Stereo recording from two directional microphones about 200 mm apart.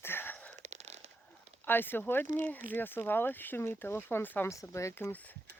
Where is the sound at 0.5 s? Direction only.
35° right (ahead or behind).